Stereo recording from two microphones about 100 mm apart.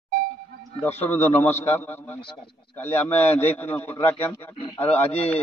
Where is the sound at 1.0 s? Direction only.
20° left (ahead or behind).